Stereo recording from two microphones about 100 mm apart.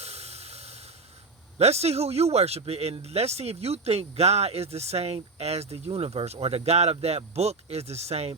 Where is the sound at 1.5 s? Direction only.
90° right.